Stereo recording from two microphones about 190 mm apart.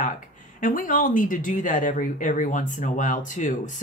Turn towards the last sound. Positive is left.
turn(degrees=40)  # may be behind; listen again after turning